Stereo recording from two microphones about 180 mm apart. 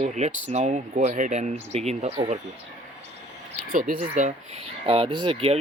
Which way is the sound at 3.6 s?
50° right (ahead or behind).